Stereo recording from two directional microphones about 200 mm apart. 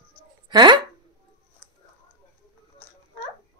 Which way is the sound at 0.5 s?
20° right (ahead or behind).